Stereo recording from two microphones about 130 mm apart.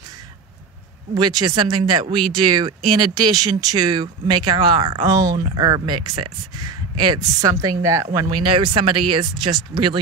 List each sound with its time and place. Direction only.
1.1 s speech: 30° right (ahead or behind)